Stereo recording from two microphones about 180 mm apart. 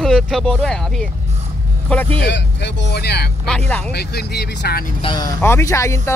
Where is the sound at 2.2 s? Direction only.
75° left (ahead or behind).